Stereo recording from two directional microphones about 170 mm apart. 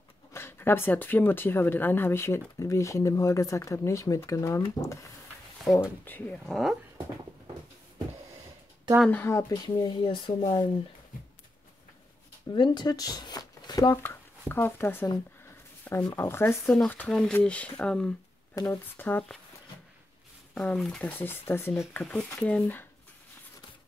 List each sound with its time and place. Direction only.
0.3 s speech: 15° left (ahead or behind)
9.0 s speech: 10° left (ahead or behind); by 10.6 s 30° left (ahead or behind)
12.5 s speech: 25° left (ahead or behind)
14.5 s speech: 10° left (ahead or behind)
18.5 s speech: 15° left (ahead or behind)
20.5 s speech: 5° left (ahead or behind)